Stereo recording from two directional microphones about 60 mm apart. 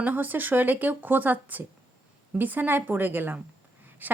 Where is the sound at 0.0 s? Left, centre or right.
Right.